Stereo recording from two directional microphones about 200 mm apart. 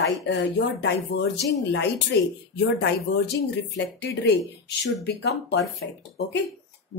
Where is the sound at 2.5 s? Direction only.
60° left (ahead or behind).